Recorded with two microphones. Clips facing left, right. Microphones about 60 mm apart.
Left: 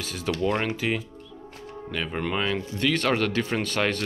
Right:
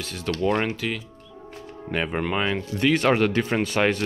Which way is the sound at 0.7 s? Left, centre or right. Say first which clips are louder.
Left 1 dB; centre.